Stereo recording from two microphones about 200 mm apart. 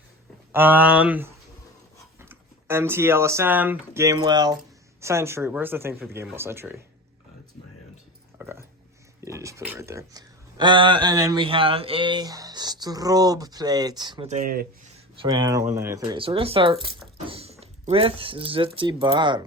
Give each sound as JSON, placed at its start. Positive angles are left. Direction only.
{"t": 0.5, "sound": "speech", "side_deg": -10}
{"t": 8.4, "sound": "a sound", "side_deg": -10}
{"t": 9.2, "sound": "speech", "side_deg": -15}
{"t": 14.3, "sound": "speech", "side_deg": -40}
{"t": 15.2, "sound": "speech", "side_deg": -20}